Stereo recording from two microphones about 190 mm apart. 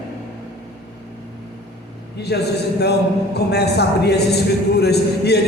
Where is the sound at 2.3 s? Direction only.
60° left (ahead or behind).